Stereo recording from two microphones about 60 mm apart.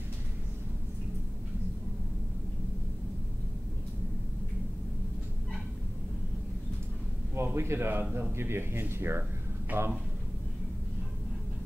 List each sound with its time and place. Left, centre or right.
7.3 s a man's voice: right